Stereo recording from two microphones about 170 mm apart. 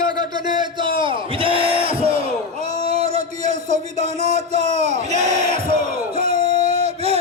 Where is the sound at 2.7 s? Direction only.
40° right (ahead or behind).